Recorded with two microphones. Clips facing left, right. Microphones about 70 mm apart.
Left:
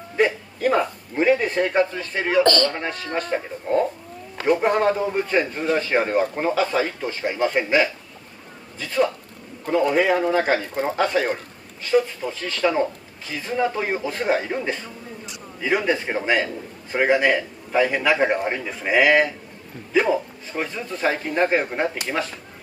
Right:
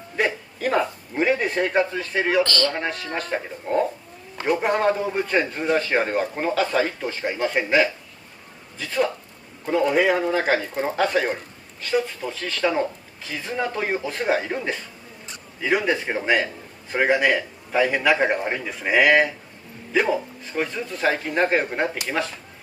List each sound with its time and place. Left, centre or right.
0.1 s speech: centre
2.4 s speech: left
2.7 s speech: centre